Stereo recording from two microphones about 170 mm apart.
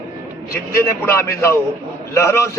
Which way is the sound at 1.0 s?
15° left (ahead or behind).